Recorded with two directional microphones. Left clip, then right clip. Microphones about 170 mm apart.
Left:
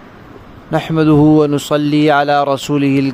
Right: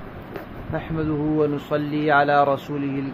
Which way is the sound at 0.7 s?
90° left.